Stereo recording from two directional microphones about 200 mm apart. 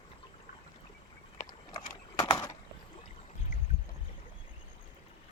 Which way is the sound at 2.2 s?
20° left (ahead or behind).